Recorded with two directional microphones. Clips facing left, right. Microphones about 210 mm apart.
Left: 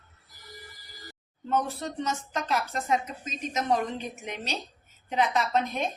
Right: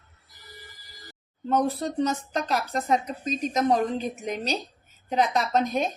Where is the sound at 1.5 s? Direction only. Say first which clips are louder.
Right 5 dB; 35° right (ahead or behind).